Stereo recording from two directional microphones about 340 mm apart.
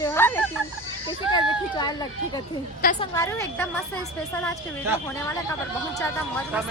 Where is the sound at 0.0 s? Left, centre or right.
Centre.